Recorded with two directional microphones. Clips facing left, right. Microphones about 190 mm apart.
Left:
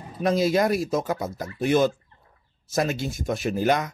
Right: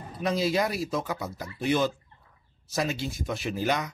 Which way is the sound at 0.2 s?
50° left (ahead or behind).